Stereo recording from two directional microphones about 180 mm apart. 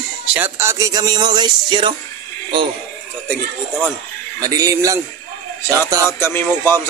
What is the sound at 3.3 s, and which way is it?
Speech, 5° left (ahead or behind).